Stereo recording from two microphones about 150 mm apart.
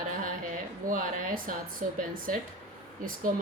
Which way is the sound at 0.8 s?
65° right (ahead or behind).